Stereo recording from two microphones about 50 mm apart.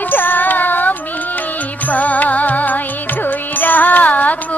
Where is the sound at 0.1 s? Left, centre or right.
Left.